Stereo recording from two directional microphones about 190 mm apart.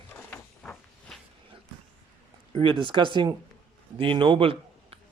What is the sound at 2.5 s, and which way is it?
A man's voice, 25° right (ahead or behind).